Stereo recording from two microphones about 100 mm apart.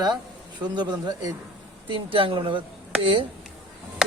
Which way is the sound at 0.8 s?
45° right (ahead or behind).